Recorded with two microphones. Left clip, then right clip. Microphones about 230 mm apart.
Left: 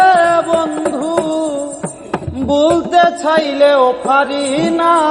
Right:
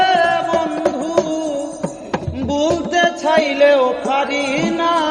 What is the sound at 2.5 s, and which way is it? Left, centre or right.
Music, left.